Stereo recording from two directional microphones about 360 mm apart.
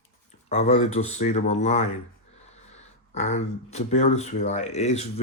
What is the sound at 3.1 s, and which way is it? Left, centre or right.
Speech, centre.